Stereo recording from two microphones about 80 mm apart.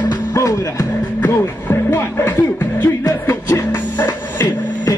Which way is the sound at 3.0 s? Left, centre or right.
Left.